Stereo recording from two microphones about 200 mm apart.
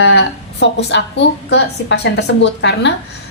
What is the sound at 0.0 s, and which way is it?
A woman's voice, 60° left (ahead or behind).